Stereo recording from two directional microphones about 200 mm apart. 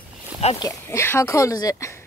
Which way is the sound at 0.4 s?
30° left (ahead or behind).